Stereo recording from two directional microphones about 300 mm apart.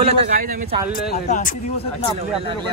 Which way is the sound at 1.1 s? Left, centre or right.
Left.